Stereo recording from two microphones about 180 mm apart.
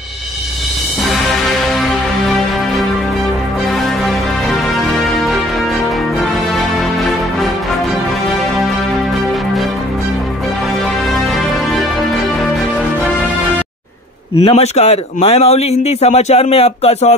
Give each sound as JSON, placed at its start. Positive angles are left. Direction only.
{"t": 4.0, "sound": "music", "side_deg": 0}
{"t": 14.4, "sound": "speech", "side_deg": 35}